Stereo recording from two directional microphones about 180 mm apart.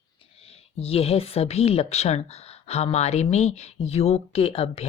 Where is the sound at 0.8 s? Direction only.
35° left (ahead or behind).